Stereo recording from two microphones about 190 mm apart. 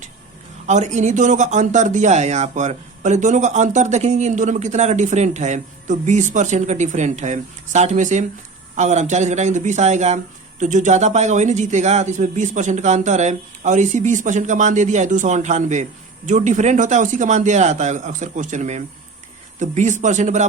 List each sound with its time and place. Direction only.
0.7 s speech: 40° right (ahead or behind)